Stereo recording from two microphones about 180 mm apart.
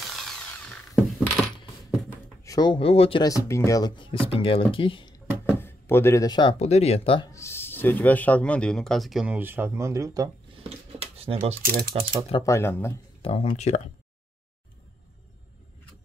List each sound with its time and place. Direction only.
0.0 s tools: centre (ahead or behind)
1.4 s coin: centre (ahead or behind)
2.0 s speech: 20° left (ahead or behind)
5.6 s speech: 15° left (ahead or behind)
6.6 s speech: 35° left (ahead or behind)
7.2 s speech: 15° left (ahead or behind); by 10.3 s 20° right (ahead or behind)
10.9 s a sound: 35° right (ahead or behind)
11.6 s speech: 55° right (ahead or behind)
11.9 s speech: 30° right (ahead or behind)
12.4 s speech: 15° left (ahead or behind)
13.2 s speech: 30° left (ahead or behind)